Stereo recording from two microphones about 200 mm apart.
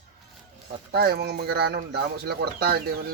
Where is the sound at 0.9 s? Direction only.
50° right (ahead or behind).